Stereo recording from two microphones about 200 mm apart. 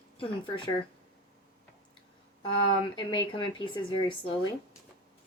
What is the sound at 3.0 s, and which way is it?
Speech, 20° left (ahead or behind).